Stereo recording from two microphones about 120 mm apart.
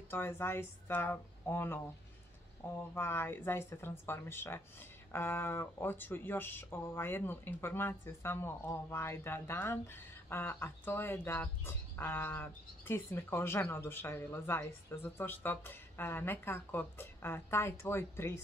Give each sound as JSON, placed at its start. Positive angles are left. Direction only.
{"t": 0.1, "sound": "speech", "side_deg": 20}
{"t": 2.9, "sound": "speech", "side_deg": 20}